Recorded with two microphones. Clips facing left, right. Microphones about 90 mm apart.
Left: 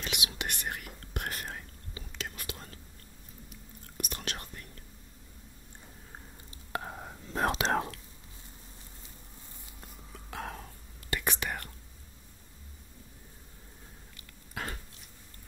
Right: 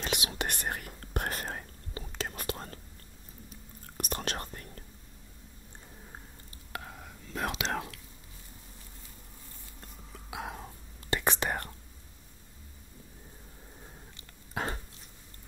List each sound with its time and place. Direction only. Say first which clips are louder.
0.0 s whispering: right 3 dB; 35° right (ahead or behind)
3.9 s whispering: right 4 dB; 40° right (ahead or behind)
6.7 s whispering: left 5 dB; 30° left (ahead or behind)
10.1 s hiccup: even; 10° right (ahead or behind)
10.6 s whispering: right 3 dB; 30° right (ahead or behind)
14.5 s a sound: right 4 dB; 30° right (ahead or behind)